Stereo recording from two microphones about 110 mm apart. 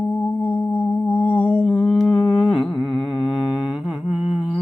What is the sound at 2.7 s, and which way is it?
Humming, 45° left (ahead or behind).